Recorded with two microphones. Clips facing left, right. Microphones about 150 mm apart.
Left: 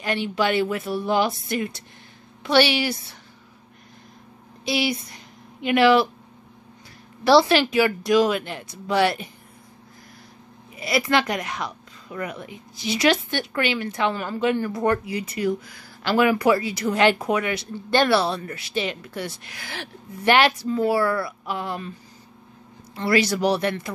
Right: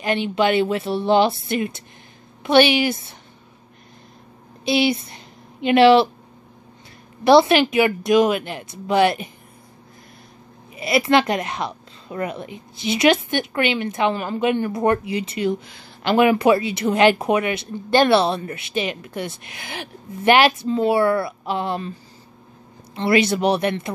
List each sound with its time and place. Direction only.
0.0 s a woman's voice: 20° right (ahead or behind)
4.6 s a woman's voice: 25° right (ahead or behind)
7.2 s a woman's voice: 20° right (ahead or behind)
10.7 s a woman's voice: 25° right (ahead or behind)
22.9 s a woman's voice: 25° right (ahead or behind)